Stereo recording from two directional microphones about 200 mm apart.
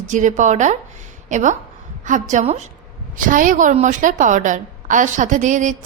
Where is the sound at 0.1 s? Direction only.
40° right (ahead or behind).